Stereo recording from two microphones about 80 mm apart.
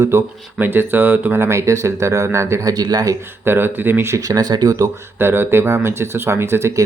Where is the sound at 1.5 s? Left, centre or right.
Right.